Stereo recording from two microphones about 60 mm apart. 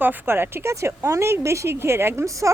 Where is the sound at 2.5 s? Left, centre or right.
Right.